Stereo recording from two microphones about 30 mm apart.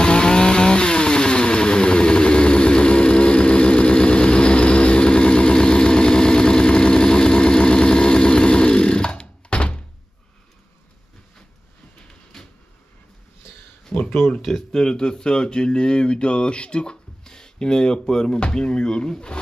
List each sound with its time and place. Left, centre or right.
0.0 s motorcycle: left
12.3 s vehicle: centre
13.9 s a sound: left
14.7 s speech: left
16.8 s speech: left